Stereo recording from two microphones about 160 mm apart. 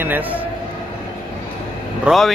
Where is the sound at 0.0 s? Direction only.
10° right (ahead or behind).